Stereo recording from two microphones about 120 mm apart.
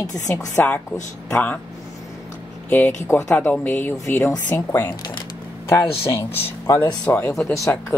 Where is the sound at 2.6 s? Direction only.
15° left (ahead or behind).